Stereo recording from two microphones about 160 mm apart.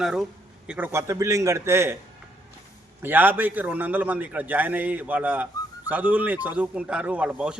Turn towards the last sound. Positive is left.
turn(degrees=-5)  # may be behind; listen again after turning